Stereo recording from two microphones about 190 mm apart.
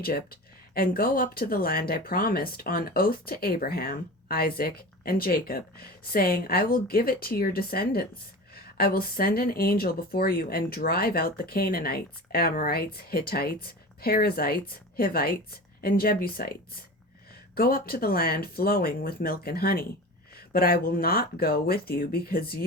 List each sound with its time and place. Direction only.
0.0 s speech: 50° left (ahead or behind)